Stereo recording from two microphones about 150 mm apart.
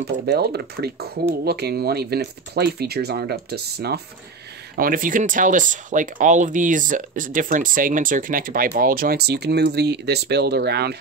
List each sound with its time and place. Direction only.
0.0 s speech: 90° right
4.7 s speech: 70° right (ahead or behind); by 11.0 s 90° right